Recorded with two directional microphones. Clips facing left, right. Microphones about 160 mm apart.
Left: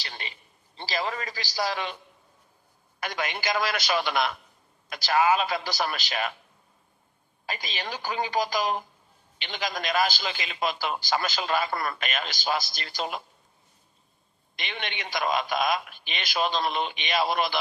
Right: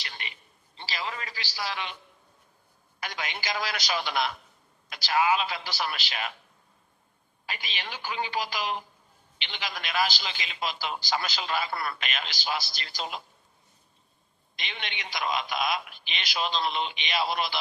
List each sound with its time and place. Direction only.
0.0 s a sound: 35° left (ahead or behind)
0.8 s a woman's voice: 40° left (ahead or behind)
3.0 s a man's voice: 50° left (ahead or behind)
7.4 s a woman's voice: 40° left (ahead or behind)
14.5 s a man's voice: 55° left (ahead or behind)